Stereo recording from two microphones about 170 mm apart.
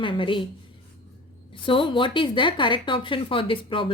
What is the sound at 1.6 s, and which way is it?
Speech, 30° left (ahead or behind).